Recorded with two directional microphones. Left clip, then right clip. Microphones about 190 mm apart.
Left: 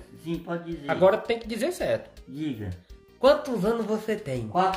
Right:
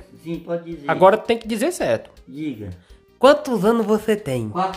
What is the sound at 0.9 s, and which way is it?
A man's voice, 45° right (ahead or behind).